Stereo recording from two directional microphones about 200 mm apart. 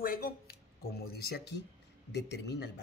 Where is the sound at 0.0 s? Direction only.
45° left (ahead or behind).